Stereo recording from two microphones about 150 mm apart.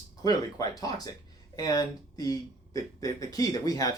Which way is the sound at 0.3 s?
25° left (ahead or behind).